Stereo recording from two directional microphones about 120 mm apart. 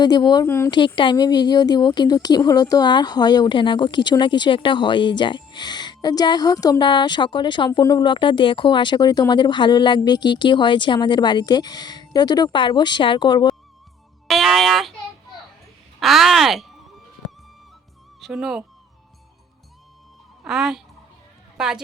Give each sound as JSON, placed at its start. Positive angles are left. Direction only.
{"t": 0.0, "sound": "a woman's voice", "side_deg": 35}
{"t": 0.4, "sound": "speech", "side_deg": 20}
{"t": 0.9, "sound": "a woman's voice", "side_deg": 40}
{"t": 14.3, "sound": "music", "side_deg": 0}
{"t": 16.0, "sound": "speech", "side_deg": 0}
{"t": 18.2, "sound": "speech", "side_deg": -5}
{"t": 20.4, "sound": "a woman's voice", "side_deg": 0}